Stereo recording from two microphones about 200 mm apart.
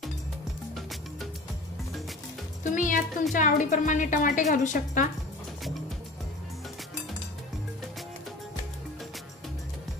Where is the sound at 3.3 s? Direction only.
40° left (ahead or behind).